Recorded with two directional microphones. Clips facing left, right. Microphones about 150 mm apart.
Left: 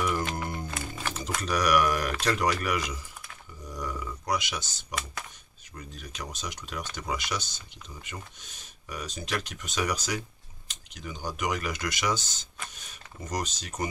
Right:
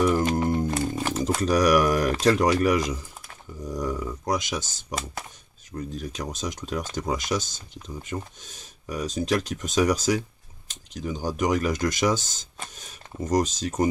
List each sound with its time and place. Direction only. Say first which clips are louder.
0.0 s music: right 8 dB; 40° right (ahead or behind)
1.0 s speech: right 6 dB; 40° right (ahead or behind)